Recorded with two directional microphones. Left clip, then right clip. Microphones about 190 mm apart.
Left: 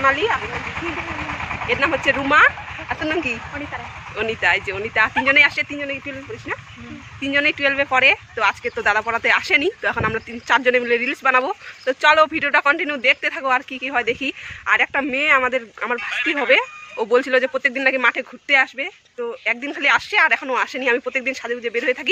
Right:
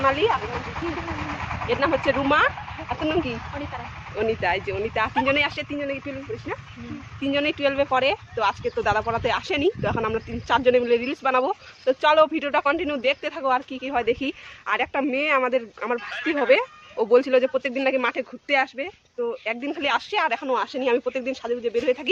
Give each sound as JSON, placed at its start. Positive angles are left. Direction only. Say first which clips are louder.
{"t": 0.0, "sound": "speech", "louder": "left 3 dB", "side_deg": 5}
{"t": 1.8, "sound": "speech", "louder": "left 2 dB", "side_deg": 5}
{"t": 4.2, "sound": "speech", "louder": "left 4 dB", "side_deg": -20}
{"t": 4.7, "sound": "speech", "louder": "left 5 dB", "side_deg": -5}